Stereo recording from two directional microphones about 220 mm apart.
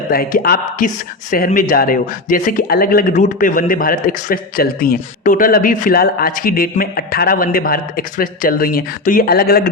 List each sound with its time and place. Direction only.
0.1 s speech: 40° left (ahead or behind)